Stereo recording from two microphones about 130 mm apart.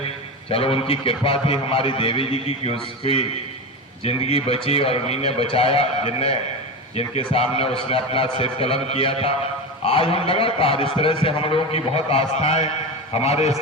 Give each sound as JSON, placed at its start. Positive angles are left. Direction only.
{"t": 0.5, "sound": "speech", "side_deg": 45}